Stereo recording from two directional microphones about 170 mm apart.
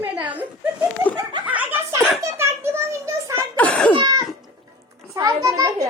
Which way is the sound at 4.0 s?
25° right (ahead or behind).